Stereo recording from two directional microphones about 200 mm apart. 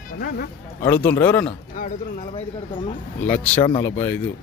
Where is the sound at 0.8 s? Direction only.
10° left (ahead or behind).